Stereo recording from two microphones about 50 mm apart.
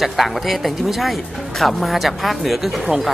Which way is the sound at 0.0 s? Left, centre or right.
Centre.